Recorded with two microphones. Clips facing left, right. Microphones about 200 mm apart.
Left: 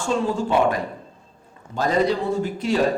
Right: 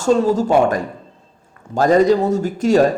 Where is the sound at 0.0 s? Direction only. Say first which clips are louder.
Right 8 dB; 40° right (ahead or behind).